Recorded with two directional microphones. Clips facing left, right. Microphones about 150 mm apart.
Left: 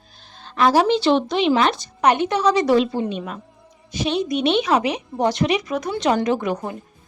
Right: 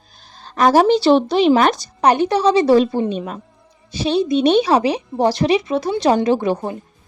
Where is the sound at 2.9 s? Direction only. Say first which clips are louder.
Right 4 dB; 40° right (ahead or behind).